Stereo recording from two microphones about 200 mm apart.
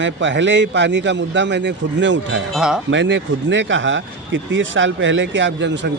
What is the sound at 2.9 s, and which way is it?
Speech, 65° right (ahead or behind).